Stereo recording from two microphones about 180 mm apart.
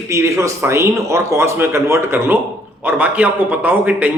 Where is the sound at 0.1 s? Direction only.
15° right (ahead or behind).